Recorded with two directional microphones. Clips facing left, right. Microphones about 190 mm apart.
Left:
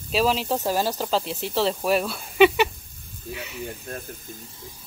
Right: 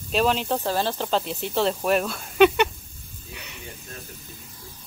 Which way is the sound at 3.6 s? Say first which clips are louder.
Left 7 dB; 55° left (ahead or behind).